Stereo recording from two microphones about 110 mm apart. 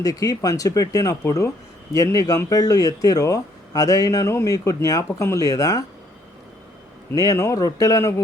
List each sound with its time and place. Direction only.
0.0 s speech: 35° left (ahead or behind)
7.1 s speech: 30° left (ahead or behind)